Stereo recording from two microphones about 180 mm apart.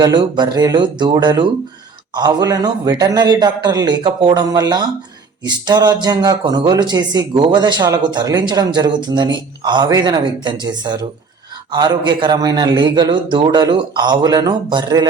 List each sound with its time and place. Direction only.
0.0 s a man's voice: 25° right (ahead or behind)